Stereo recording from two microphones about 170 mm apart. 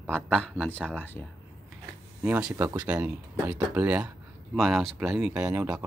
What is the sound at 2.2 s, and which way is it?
A man's voice, 10° right (ahead or behind).